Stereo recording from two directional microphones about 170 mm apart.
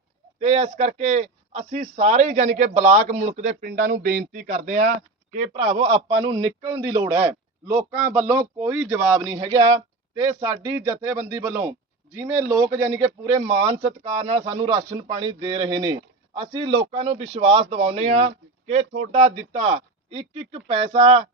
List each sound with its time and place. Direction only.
0.3 s a man's voice: 35° right (ahead or behind)